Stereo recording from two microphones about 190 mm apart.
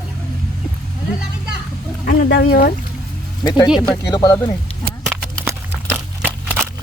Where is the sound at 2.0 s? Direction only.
50° left (ahead or behind).